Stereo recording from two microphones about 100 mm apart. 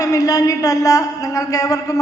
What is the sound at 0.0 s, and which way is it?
A woman's voice, 35° left (ahead or behind).